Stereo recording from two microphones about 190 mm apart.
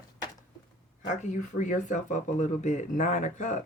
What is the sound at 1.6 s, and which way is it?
Speech, 40° left (ahead or behind).